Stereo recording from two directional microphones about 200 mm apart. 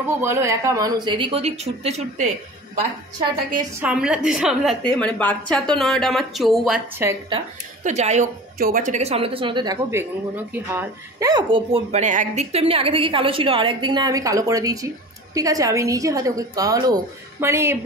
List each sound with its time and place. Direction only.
0.0 s a woman's voice: 10° right (ahead or behind); by 2.3 s 35° right (ahead or behind)
3.8 s a woman's voice: 5° right (ahead or behind)
7.0 s a woman's voice: 15° right (ahead or behind)
7.8 s a woman's voice: 35° right (ahead or behind); by 17.7 s 10° right (ahead or behind)